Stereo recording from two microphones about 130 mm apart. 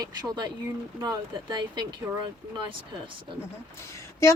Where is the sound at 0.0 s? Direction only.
30° right (ahead or behind).